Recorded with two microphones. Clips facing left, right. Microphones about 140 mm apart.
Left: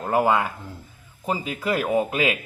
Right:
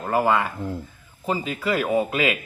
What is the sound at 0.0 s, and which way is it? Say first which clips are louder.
A man's voice: even; 10° left (ahead or behind).